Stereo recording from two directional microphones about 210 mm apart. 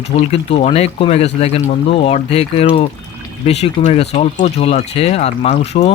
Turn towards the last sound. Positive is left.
turn(degrees=30)  # may be behind; listen again after turning